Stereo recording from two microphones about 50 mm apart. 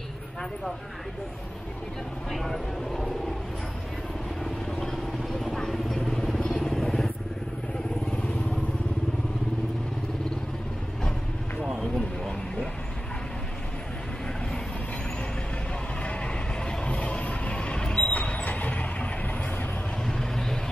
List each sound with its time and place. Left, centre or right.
2.3 s speech: centre
4.7 s vehicle: centre
16.0 s vehicle: left
20.1 s vehicle: centre